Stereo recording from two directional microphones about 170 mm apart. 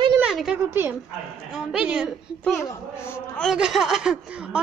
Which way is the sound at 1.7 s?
5° right (ahead or behind).